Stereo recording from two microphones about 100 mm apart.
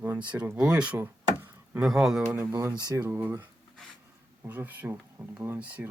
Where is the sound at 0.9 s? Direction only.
25° right (ahead or behind).